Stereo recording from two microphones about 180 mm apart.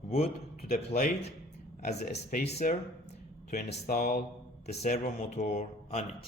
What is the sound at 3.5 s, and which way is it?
Speech, 55° left (ahead or behind).